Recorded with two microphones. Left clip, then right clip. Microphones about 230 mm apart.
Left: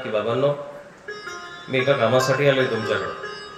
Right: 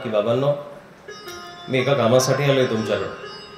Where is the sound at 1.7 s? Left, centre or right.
Right.